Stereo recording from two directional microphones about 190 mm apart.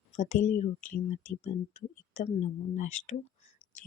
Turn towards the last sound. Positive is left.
turn(degrees=40)  # may be behind; listen again after turning